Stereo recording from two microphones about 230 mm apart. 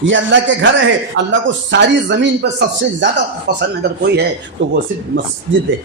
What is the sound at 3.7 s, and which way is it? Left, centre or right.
Speech, right.